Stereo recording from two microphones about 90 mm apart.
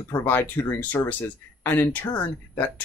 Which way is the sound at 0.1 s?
25° left (ahead or behind).